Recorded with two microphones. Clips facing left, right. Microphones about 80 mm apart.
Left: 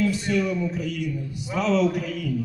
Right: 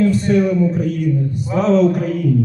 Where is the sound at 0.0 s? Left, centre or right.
Right.